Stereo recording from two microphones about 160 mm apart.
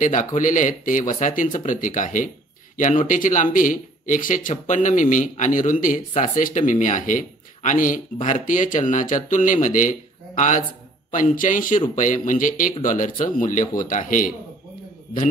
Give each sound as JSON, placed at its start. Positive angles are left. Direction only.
{"t": 0.0, "sound": "speech", "side_deg": 50}